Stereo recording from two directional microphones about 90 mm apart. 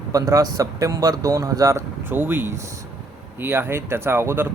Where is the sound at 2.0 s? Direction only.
25° right (ahead or behind).